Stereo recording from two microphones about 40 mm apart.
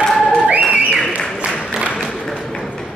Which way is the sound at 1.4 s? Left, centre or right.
Right.